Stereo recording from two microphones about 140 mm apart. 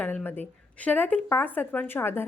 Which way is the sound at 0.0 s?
10° left (ahead or behind).